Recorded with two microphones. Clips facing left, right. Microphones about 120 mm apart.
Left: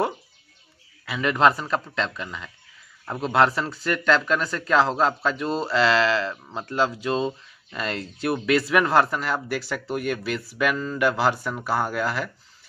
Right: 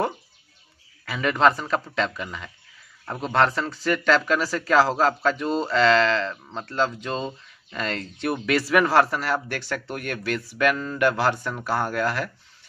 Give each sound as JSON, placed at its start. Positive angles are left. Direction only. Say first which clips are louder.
{"t": 1.0, "sound": "speech", "louder": "even", "side_deg": 0}